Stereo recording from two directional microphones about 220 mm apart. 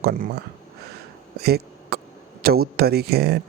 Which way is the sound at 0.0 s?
40° right (ahead or behind).